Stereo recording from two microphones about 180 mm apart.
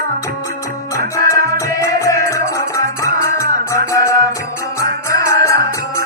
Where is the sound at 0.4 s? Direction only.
15° left (ahead or behind).